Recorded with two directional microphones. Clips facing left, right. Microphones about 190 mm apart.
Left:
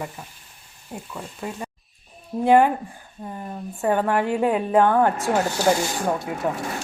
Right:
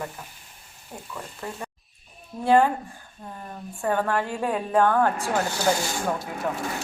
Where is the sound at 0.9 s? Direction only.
15° left (ahead or behind).